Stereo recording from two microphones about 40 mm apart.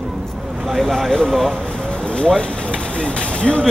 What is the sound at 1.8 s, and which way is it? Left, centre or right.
Vehicle, left.